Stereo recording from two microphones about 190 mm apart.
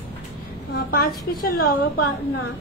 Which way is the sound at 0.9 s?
50° left (ahead or behind).